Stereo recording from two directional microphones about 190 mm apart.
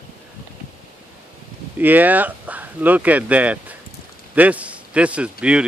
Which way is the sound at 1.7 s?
10° right (ahead or behind).